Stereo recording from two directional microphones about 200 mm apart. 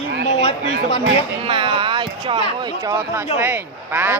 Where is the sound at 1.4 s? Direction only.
25° right (ahead or behind).